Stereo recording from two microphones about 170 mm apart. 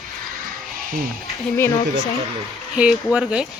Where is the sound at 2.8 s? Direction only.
5° right (ahead or behind).